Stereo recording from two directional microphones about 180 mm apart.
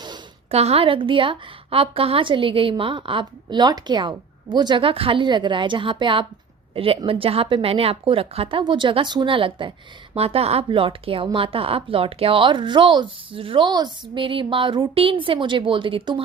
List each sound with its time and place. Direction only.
0.5 s speech: 35° right (ahead or behind)